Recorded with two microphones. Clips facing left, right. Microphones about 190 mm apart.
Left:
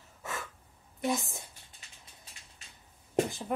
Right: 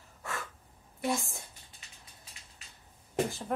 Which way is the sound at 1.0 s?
Centre (ahead or behind).